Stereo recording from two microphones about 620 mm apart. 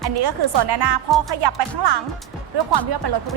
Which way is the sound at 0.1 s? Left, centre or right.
Right.